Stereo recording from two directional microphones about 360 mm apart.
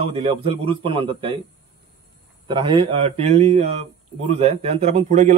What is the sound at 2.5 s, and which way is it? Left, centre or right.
Speech, centre.